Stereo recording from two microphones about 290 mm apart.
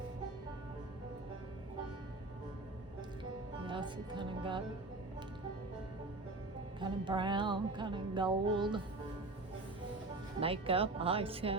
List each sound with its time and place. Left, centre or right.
3.7 s speech: centre
6.7 s music: centre
10.4 s a woman's voice: centre